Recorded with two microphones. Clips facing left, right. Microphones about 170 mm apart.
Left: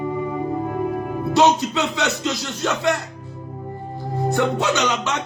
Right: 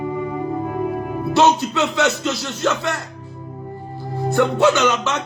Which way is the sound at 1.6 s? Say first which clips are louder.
Right 3 dB; 15° left (ahead or behind).